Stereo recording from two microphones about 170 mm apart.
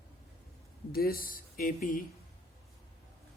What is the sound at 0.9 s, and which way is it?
Speech, 60° left (ahead or behind).